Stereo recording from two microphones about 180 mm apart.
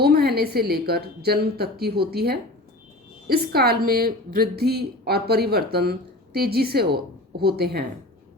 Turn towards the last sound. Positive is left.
turn(degrees=-60)  # may be behind; listen again after turning